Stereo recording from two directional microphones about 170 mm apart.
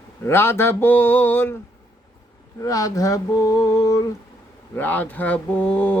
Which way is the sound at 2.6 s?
20° left (ahead or behind).